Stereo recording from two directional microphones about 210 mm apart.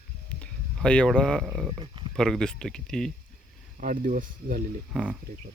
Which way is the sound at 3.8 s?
40° right (ahead or behind).